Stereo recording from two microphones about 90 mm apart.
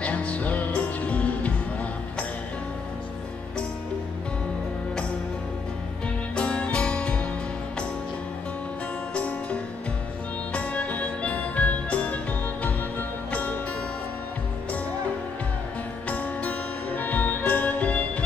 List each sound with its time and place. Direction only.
0.0 s music: 15° left (ahead or behind)
6.3 s music: 10° left (ahead or behind)
9.1 s music: 15° left (ahead or behind)
13.3 s music: 15° left (ahead or behind)
16.1 s music: 15° left (ahead or behind)